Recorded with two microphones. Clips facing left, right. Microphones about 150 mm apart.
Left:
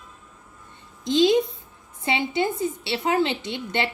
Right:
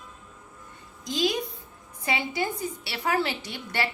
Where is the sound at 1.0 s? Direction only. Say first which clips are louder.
Left 9 dB; 25° left (ahead or behind).